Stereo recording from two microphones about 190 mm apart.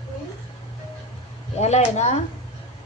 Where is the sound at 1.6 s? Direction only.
35° left (ahead or behind).